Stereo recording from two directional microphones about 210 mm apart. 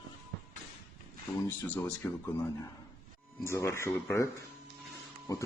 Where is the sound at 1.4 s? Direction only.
10° left (ahead or behind).